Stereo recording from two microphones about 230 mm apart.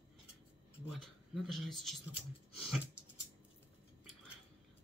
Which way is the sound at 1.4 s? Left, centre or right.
Centre.